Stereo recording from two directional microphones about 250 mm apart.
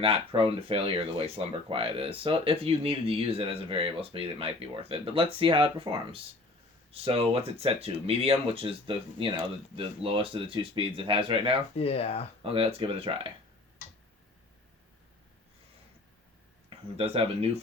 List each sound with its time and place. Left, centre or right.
0.0 s speech: right
11.8 s speech: left
12.4 s speech: right
16.6 s speech: right